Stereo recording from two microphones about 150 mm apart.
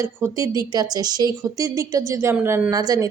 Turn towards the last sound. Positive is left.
turn(degrees=-25)  # may be behind; listen again after turning